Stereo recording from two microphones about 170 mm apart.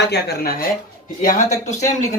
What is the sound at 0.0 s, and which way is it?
Speech, 75° left (ahead or behind).